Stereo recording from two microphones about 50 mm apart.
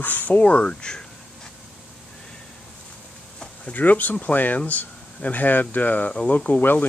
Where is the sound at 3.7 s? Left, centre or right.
Left.